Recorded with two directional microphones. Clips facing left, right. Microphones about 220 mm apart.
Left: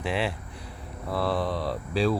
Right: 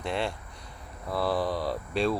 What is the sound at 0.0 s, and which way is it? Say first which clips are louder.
Speech: left 2 dB; 5° left (ahead or behind).